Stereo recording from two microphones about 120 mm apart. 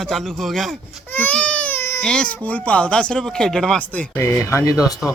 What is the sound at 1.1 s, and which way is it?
Baby cry, 15° left (ahead or behind).